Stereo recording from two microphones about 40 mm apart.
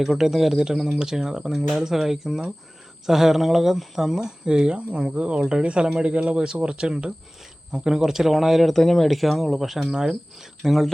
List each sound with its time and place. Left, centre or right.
0.0 s speech: centre
8.7 s speech: centre
9.9 s speech: centre
10.6 s speech: centre